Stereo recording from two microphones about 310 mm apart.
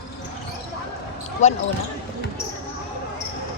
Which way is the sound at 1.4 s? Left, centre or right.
Left.